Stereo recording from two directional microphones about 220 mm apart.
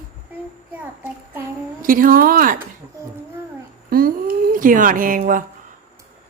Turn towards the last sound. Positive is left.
turn(degrees=-40)  # may be behind; listen again after turning